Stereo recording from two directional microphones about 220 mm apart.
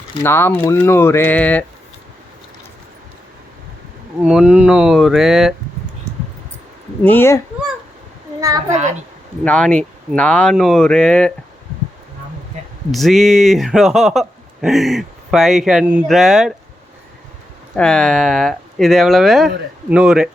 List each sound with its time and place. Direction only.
0.2 s speech: 10° left (ahead or behind)
4.2 s speech: 5° right (ahead or behind)
7.0 s speech: 10° left (ahead or behind)
8.4 s a child's voice: 15° right (ahead or behind)
9.4 s speech: 5° left (ahead or behind)
12.9 s speech: centre (ahead or behind)
17.7 s speech: 5° left (ahead or behind)